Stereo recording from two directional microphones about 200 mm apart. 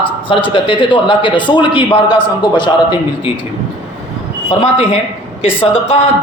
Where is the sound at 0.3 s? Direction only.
25° left (ahead or behind).